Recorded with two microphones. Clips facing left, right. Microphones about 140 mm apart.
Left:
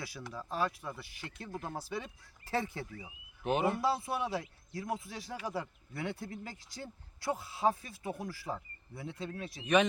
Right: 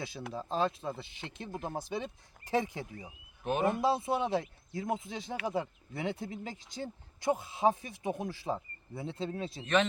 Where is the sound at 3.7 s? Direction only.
20° right (ahead or behind).